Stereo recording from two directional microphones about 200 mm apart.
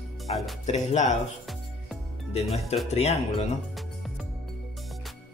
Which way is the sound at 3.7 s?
Centre (ahead or behind).